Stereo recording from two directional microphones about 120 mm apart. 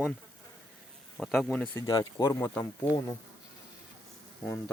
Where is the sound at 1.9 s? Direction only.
30° left (ahead or behind).